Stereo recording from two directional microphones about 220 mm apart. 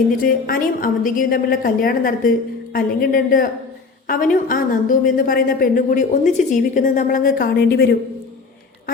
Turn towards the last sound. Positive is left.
turn(degrees=45)  # may be behind; listen again after turning